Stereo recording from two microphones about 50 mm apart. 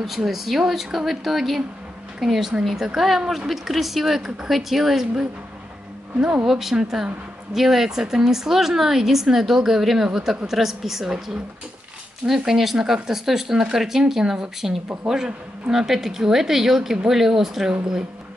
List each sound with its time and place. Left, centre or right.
0.0 s speech: centre
6.2 s speech: centre
6.5 s speech: centre